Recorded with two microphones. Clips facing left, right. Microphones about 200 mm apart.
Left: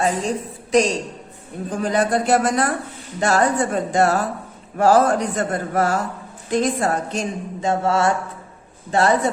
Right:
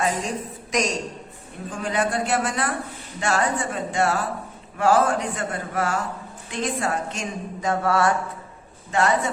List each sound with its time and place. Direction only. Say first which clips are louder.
0.0 s a woman's voice: left 4 dB; 30° left (ahead or behind)
8.9 s a woman's voice: left 4 dB; 35° left (ahead or behind)